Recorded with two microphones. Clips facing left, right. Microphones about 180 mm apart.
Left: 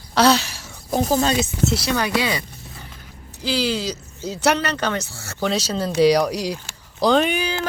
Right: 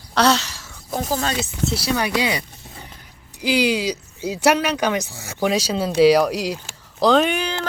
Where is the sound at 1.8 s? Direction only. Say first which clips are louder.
Even; 10° right (ahead or behind).